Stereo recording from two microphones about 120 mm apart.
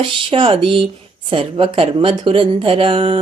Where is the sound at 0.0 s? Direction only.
45° right (ahead or behind).